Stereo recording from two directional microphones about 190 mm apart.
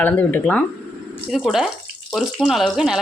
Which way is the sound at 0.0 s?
10° left (ahead or behind).